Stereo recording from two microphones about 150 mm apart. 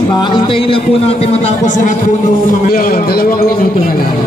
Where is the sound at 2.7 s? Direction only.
80° left.